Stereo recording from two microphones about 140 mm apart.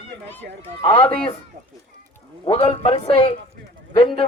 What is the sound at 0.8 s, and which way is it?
Speech, 40° left (ahead or behind).